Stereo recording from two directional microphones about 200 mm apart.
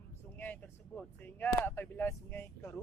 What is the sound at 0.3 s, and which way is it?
Speech, 10° left (ahead or behind).